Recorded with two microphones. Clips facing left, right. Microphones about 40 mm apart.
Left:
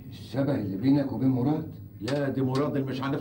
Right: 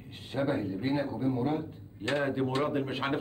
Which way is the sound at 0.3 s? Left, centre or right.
Right.